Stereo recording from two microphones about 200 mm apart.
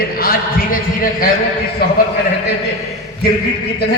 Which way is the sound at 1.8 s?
55° left (ahead or behind).